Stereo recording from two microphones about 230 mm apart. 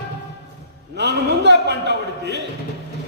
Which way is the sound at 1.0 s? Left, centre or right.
Right.